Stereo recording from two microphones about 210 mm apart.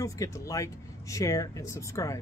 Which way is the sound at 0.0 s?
15° left (ahead or behind).